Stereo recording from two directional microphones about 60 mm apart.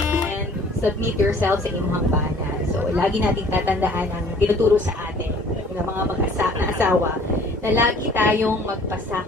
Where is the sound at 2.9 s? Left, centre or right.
Right.